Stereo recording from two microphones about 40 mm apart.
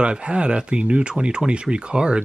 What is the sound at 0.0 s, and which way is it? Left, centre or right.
Speech, right.